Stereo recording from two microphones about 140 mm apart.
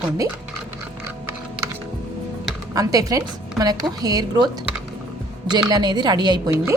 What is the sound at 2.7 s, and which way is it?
A woman's voice, 25° right (ahead or behind).